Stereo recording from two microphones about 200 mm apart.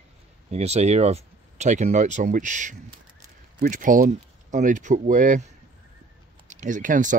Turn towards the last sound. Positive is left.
turn(degrees=-40)  # may be behind; listen again after turning